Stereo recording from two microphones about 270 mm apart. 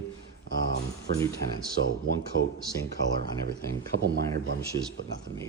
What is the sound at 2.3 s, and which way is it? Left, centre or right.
Speech, right.